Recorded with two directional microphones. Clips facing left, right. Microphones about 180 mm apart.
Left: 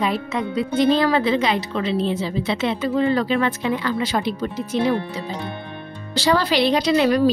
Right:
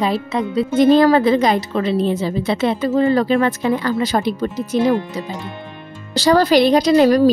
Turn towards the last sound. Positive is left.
turn(degrees=-40)  # may be behind; listen again after turning